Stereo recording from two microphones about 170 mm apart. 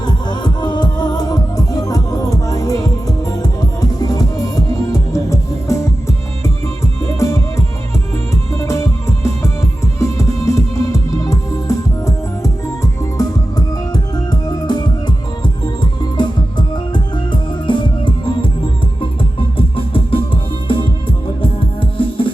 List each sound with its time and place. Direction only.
0.0 s music: 25° left (ahead or behind)
8.6 s music: 20° left (ahead or behind)